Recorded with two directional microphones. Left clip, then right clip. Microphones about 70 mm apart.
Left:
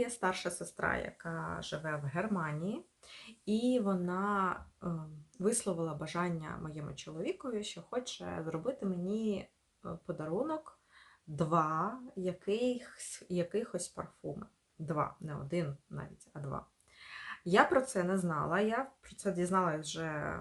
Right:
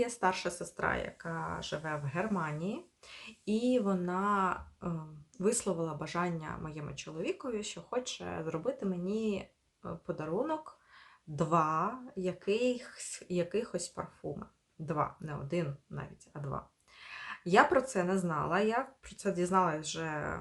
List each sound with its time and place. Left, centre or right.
0.0 s speech: right